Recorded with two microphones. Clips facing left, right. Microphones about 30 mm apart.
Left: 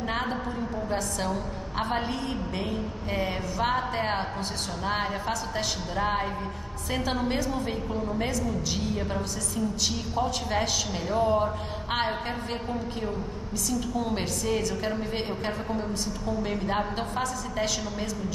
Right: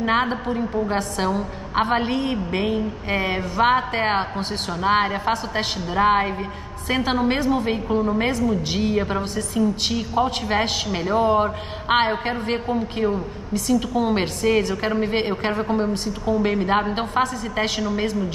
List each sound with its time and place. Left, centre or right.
0.0 s a woman's voice: right
1.9 s a woman's voice: right